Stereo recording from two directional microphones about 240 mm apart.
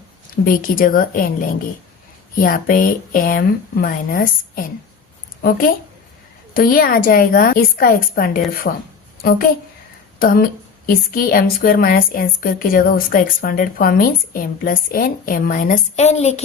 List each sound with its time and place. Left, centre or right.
0.4 s a woman's voice: left
10.2 s a woman's voice: left